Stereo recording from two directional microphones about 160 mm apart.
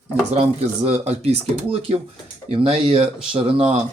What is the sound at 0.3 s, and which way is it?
Speech, 40° right (ahead or behind).